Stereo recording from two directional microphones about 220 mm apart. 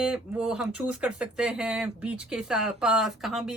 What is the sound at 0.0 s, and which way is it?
Speech, 5° right (ahead or behind).